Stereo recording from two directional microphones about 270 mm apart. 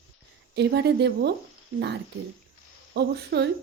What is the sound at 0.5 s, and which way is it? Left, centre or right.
Speech, right.